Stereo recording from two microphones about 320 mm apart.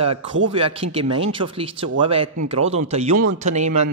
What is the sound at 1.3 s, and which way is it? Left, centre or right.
Speech, centre.